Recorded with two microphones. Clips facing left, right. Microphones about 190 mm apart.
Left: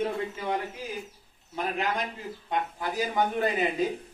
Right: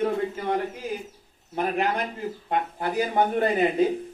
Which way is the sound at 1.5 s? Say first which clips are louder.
Right 5 dB; 55° right (ahead or behind).